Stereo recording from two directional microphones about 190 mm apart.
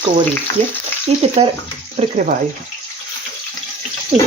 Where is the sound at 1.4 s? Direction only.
30° right (ahead or behind).